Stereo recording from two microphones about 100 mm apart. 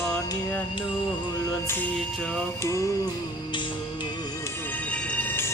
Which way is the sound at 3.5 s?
50° left (ahead or behind).